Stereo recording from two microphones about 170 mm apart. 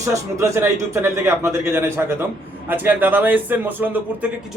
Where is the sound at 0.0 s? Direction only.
15° right (ahead or behind).